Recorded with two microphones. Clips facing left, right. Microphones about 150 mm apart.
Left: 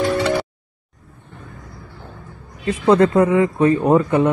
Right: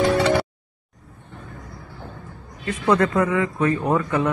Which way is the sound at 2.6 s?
30° left (ahead or behind).